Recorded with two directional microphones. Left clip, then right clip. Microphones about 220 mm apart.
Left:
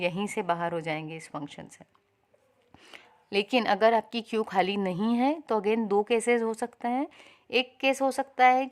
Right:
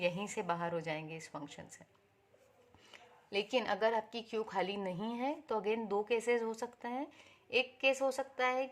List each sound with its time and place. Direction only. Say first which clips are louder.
0.0 s a woman's voice: left 7 dB; 40° left (ahead or behind)